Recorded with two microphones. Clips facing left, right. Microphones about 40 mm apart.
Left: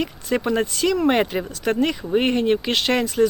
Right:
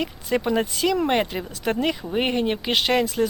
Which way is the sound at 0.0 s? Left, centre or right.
Centre.